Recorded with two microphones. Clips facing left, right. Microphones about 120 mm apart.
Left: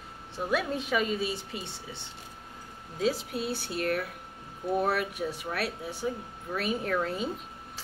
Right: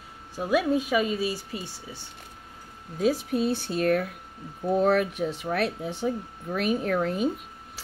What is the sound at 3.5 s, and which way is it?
Speech, 20° right (ahead or behind).